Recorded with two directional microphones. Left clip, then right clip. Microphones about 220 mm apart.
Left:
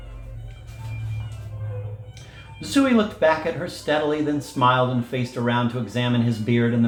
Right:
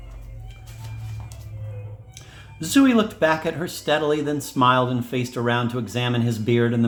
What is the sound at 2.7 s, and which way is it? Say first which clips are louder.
Speech: right 1 dB; 50° right (ahead or behind).